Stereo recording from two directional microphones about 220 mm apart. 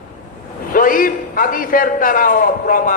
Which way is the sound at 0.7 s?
40° left (ahead or behind).